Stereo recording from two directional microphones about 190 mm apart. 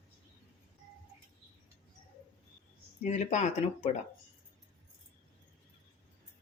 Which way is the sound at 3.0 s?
40° left (ahead or behind).